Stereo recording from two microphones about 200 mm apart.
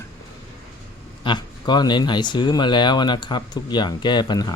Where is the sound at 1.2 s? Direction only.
20° left (ahead or behind).